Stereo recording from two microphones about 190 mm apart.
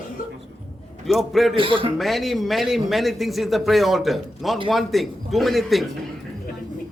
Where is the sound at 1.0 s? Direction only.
Centre (ahead or behind).